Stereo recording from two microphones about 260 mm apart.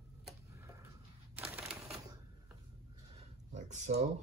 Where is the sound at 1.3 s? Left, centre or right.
Centre.